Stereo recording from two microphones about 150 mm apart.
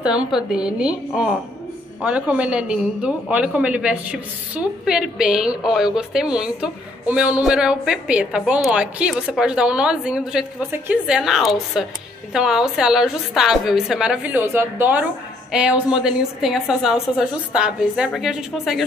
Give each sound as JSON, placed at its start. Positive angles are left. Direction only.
{"t": 0.0, "sound": "a woman's voice", "side_deg": -5}